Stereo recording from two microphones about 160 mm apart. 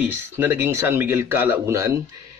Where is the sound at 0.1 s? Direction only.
15° right (ahead or behind).